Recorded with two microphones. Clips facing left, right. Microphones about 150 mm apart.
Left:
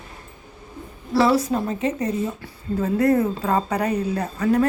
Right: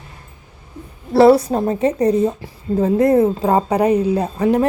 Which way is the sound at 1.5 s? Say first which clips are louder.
Right 6 dB; 40° right (ahead or behind).